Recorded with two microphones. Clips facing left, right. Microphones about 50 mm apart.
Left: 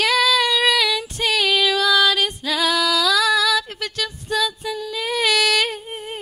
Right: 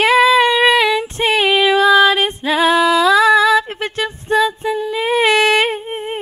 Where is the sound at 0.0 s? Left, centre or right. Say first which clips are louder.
Right 7 dB; right.